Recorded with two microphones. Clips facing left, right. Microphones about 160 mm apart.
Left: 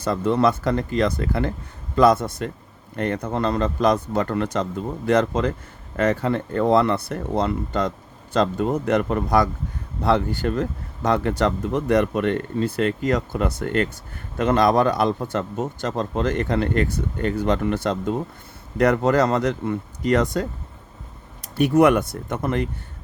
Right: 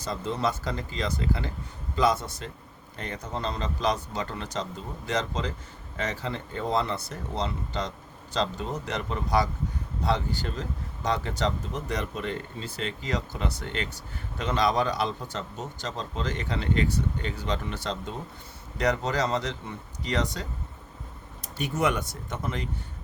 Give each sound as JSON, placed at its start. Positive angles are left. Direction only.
{"t": 0.0, "sound": "speech", "side_deg": 60}
{"t": 21.5, "sound": "speech", "side_deg": 60}